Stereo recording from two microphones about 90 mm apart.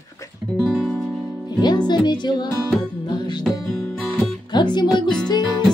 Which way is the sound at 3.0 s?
55° left (ahead or behind).